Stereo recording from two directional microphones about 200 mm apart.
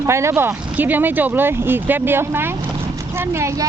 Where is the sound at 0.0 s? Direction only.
15° right (ahead or behind).